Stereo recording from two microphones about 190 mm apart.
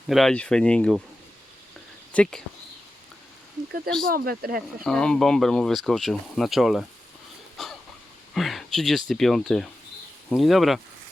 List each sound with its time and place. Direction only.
0.1 s speech: centre (ahead or behind)
2.1 s speech: 5° left (ahead or behind)
4.0 s speech: 50° right (ahead or behind)
4.8 s speech: 5° left (ahead or behind)
7.5 s a sound: centre (ahead or behind)
8.3 s speech: centre (ahead or behind)